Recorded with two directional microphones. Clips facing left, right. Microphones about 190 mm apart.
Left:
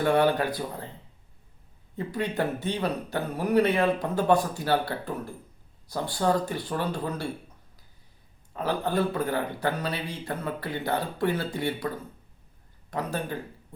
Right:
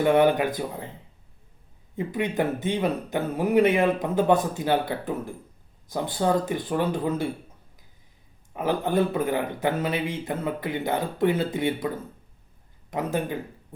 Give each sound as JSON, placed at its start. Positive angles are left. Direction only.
{"t": 0.0, "sound": "speech", "side_deg": -20}
{"t": 2.0, "sound": "speech", "side_deg": -15}
{"t": 8.5, "sound": "speech", "side_deg": -15}
{"t": 12.9, "sound": "speech", "side_deg": -15}